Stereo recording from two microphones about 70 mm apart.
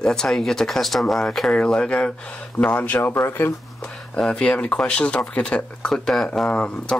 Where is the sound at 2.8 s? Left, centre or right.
Left.